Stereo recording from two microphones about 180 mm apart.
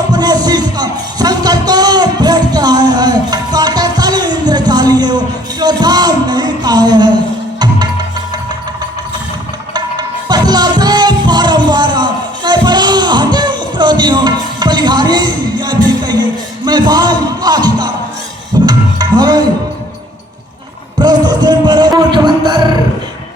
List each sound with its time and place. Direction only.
0.1 s music: 20° right (ahead or behind)
9.7 s music: 25° right (ahead or behind)
21.0 s music: 25° right (ahead or behind)